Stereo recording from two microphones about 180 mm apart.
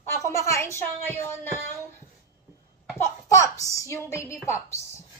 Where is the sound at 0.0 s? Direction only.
15° left (ahead or behind).